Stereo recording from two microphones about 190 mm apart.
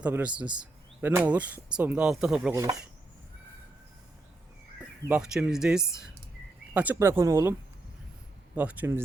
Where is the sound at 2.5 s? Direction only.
15° right (ahead or behind).